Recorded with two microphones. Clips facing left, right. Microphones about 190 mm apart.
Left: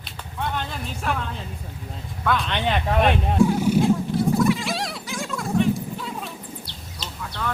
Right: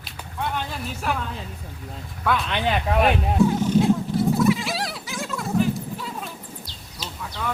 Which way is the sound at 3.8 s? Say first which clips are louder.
Even; centre (ahead or behind).